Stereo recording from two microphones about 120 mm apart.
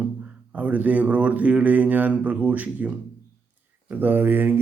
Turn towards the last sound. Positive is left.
turn(degrees=-15)  # may be behind; listen again after turning